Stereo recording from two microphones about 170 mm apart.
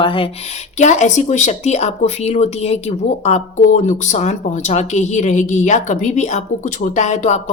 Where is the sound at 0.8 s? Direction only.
45° left (ahead or behind).